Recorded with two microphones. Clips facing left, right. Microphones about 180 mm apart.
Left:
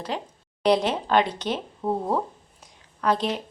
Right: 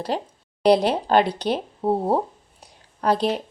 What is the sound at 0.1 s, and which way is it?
A woman's voice, 40° right (ahead or behind).